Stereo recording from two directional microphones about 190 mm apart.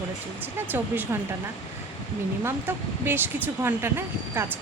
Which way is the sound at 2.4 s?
10° right (ahead or behind).